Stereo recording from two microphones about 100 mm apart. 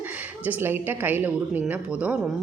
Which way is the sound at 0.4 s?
20° right (ahead or behind).